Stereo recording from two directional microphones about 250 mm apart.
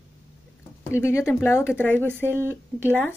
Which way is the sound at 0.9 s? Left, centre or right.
Centre.